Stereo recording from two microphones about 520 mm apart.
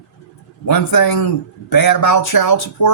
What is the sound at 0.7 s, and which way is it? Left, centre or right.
Speech, left.